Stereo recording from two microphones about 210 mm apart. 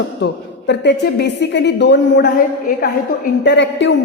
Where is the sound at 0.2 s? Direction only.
50° left (ahead or behind).